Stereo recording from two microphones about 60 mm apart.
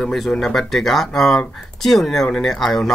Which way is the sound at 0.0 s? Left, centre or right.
Centre.